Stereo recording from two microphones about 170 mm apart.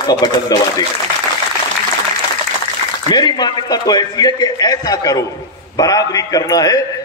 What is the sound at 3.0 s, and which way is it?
A man's voice, 25° left (ahead or behind).